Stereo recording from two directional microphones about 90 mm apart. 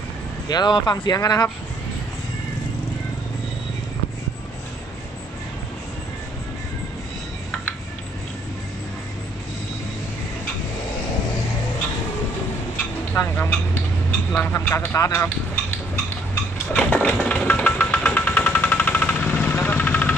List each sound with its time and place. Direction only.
0.4 s speech: 50° left (ahead or behind)
13.1 s speech: 30° left (ahead or behind)
16.7 s a sound: 15° left (ahead or behind)
17.2 s music: 15° left (ahead or behind)
19.8 s vehicle: 15° left (ahead or behind)